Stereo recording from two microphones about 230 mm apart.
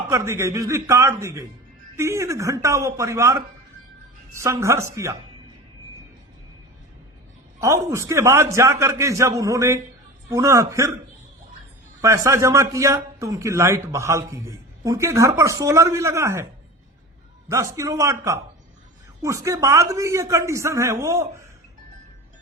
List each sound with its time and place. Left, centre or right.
0.1 s a man's voice: centre
7.9 s a man's voice: centre
12.0 s a man's voice: centre
17.5 s a man's voice: centre